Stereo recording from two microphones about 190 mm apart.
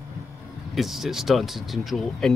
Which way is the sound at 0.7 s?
Centre (ahead or behind).